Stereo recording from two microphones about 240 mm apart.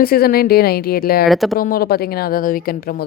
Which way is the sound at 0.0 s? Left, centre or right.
Left.